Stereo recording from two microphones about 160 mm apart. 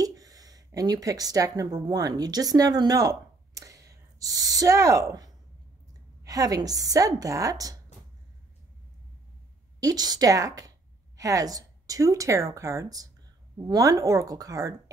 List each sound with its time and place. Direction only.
0.0 s a woman's voice: 20° right (ahead or behind)
9.8 s a woman's voice: 25° right (ahead or behind)